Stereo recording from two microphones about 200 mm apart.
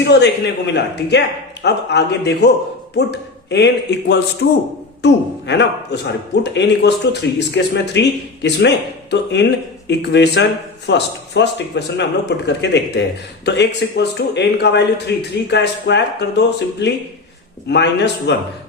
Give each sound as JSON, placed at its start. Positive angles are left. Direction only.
{"t": 0.0, "sound": "speech", "side_deg": 55}